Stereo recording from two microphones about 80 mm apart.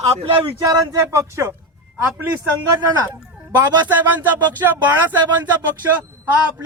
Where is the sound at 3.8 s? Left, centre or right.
Right.